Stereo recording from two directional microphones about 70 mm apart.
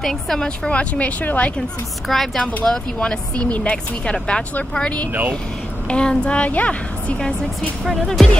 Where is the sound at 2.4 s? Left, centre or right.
Centre.